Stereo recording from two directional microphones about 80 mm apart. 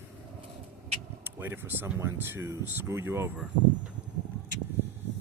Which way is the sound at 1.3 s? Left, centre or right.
Right.